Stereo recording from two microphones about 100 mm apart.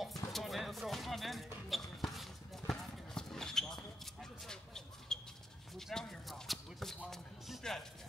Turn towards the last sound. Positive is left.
turn(degrees=5)  # may be behind; listen again after turning